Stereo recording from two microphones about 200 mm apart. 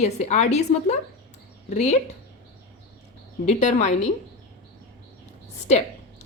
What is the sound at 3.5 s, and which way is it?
Speech, 35° left (ahead or behind).